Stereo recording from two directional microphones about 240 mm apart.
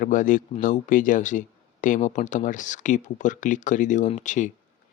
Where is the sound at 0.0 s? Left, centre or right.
Left.